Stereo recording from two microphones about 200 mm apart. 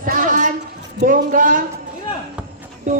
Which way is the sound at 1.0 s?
40° right (ahead or behind).